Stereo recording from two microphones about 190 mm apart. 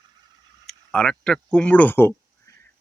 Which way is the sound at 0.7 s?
5° left (ahead or behind).